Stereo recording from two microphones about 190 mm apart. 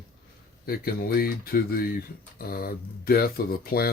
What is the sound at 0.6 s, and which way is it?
Speech, 50° left (ahead or behind).